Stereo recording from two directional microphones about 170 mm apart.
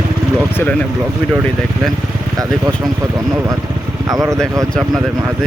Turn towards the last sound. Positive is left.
turn(degrees=-20)  # may be behind; listen again after turning